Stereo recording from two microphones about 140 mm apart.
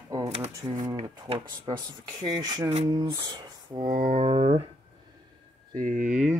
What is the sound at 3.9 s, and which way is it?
Speech, 75° right (ahead or behind).